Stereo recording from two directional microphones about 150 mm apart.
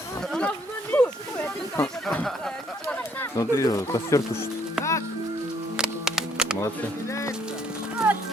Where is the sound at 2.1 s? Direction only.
5° left (ahead or behind).